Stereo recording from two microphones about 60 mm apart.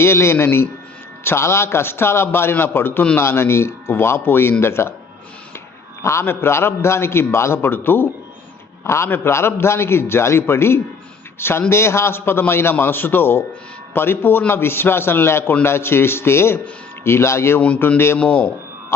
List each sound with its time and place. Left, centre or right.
0.0 s a man's voice: left
6.0 s a man's voice: left
8.8 s a man's voice: left
9.0 s a man's voice: left
18.2 s speech: left